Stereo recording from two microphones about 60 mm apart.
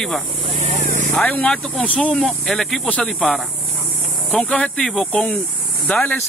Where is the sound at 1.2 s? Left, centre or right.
Left.